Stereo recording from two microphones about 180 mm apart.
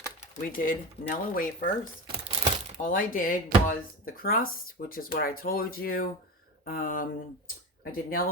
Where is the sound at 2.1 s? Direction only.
30° right (ahead or behind).